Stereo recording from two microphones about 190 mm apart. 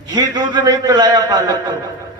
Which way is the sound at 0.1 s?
20° right (ahead or behind).